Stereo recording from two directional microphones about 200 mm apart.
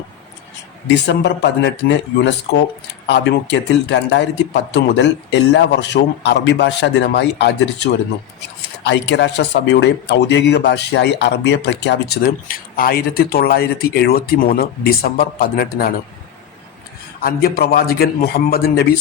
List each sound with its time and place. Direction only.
0.9 s speech: 60° left (ahead or behind)
3.5 s speech: 60° left (ahead or behind)
17.2 s speech: 50° left (ahead or behind)